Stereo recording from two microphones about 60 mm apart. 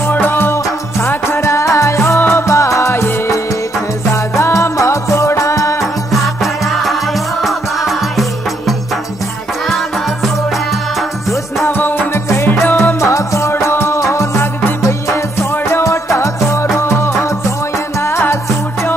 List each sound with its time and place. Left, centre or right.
0.0 s music: left
6.2 s music: centre
10.7 s music: centre
11.6 s music: left
12.6 s music: left
13.0 s music: left